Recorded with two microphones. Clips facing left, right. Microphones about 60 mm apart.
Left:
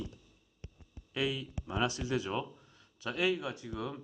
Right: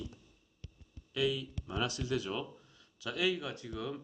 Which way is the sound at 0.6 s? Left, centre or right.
Left.